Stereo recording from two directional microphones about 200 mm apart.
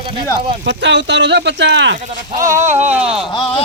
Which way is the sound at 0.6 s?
65° right (ahead or behind).